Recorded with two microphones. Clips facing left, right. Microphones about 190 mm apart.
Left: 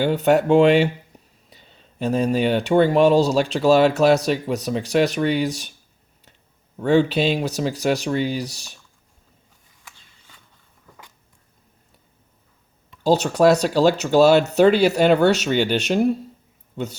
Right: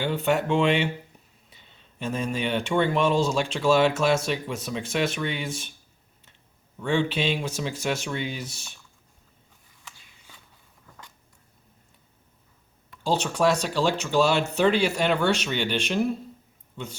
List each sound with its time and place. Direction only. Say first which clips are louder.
0.0 s speech: left 7 dB; 40° left (ahead or behind)
6.7 s speech: left 8 dB; 40° left (ahead or behind)
13.0 s a man's voice: left 7 dB; 40° left (ahead or behind)